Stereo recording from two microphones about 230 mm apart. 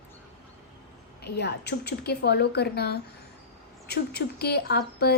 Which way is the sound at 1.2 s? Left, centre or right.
Left.